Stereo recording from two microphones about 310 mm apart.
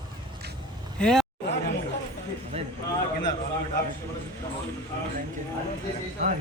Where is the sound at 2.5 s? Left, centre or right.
Centre.